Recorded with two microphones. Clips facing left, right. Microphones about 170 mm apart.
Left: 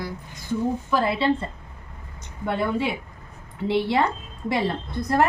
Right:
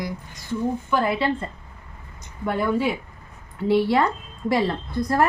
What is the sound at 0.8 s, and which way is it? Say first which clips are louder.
Speech: right 1 dB; 30° left (ahead or behind).